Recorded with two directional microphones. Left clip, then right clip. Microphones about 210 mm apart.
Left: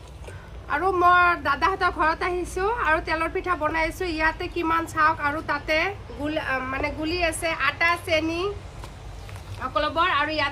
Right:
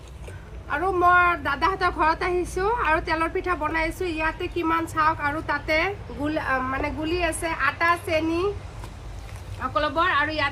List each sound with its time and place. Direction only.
0.7 s a woman's voice: 10° left (ahead or behind)
6.2 s speech: 20° right (ahead or behind)
6.7 s a woman's voice: centre (ahead or behind)
9.6 s a woman's voice: centre (ahead or behind)